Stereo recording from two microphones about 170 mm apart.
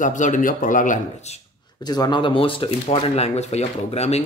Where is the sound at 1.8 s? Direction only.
25° left (ahead or behind).